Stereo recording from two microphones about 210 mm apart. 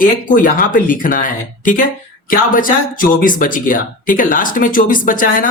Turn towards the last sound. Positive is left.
turn(degrees=40)  # may be behind; listen again after turning